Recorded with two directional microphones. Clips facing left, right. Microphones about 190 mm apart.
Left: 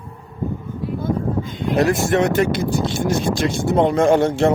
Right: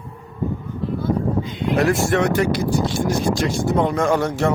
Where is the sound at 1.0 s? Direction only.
50° left (ahead or behind).